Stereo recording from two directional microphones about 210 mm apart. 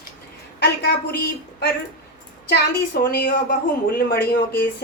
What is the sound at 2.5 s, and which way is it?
A woman's voice, 50° left (ahead or behind).